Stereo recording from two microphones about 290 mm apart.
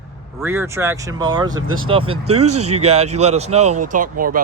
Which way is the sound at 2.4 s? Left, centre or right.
Right.